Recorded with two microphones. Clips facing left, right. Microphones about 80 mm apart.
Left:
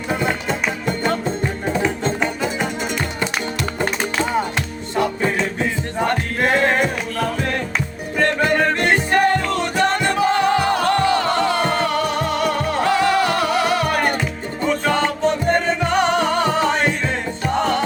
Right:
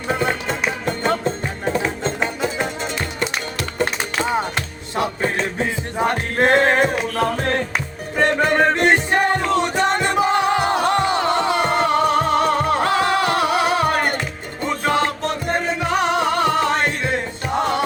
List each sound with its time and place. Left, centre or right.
6.4 s a sound: right
8.2 s music: right
14.7 s music: centre